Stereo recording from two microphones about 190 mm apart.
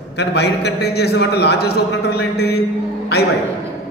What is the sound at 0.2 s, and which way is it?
A man's voice, 60° left (ahead or behind).